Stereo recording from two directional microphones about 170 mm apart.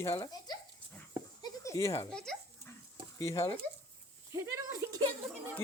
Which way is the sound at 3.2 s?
20° left (ahead or behind).